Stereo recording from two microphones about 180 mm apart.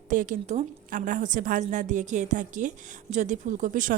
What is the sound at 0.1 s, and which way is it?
A woman's voice, 45° right (ahead or behind).